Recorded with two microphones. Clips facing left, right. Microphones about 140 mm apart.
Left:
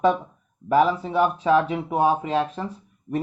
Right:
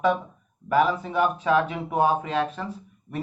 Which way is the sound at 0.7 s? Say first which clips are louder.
Left 2 dB; 30° left (ahead or behind).